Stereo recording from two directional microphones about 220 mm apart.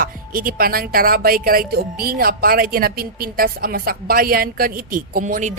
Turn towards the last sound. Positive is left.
turn(degrees=-35)  # may be behind; listen again after turning